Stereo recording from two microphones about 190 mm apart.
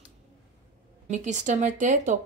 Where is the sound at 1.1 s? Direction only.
40° right (ahead or behind).